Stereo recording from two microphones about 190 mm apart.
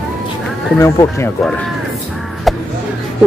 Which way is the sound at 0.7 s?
15° left (ahead or behind).